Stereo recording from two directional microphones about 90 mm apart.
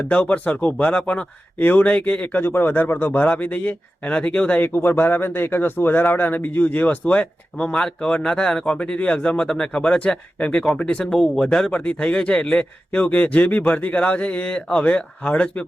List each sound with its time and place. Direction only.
0.1 s a man's voice: 15° left (ahead or behind)